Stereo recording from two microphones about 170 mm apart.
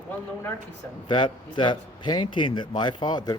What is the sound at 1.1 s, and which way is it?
A man's voice, 25° left (ahead or behind).